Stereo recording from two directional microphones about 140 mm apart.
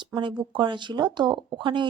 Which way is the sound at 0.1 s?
35° right (ahead or behind).